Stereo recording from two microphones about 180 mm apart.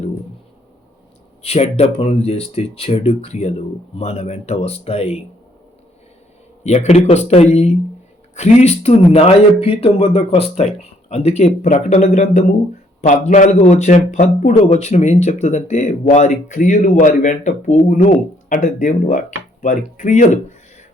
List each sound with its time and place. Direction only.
1.4 s a man's voice: 35° left (ahead or behind)
6.7 s a man's voice: 35° left (ahead or behind)